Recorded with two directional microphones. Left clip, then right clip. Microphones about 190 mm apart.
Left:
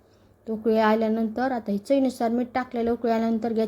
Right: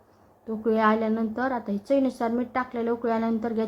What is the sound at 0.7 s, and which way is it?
Speech, 20° left (ahead or behind).